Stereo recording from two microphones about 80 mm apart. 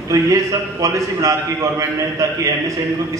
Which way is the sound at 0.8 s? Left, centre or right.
Right.